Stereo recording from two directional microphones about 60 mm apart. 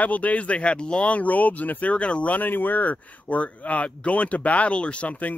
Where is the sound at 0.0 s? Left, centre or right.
Left.